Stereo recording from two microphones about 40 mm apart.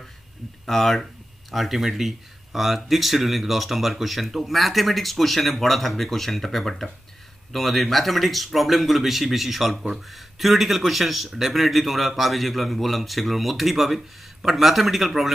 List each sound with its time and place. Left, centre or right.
0.7 s speech: centre
1.5 s speech: centre